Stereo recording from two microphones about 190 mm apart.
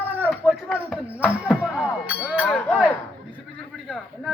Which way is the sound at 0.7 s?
5° right (ahead or behind).